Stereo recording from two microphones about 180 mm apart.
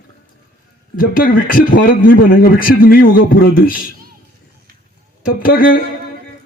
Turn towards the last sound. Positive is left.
turn(degrees=50)  # may be behind; listen again after turning